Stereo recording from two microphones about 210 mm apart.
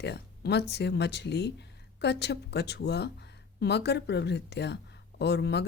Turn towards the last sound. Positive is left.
turn(degrees=55)  # may be behind; listen again after turning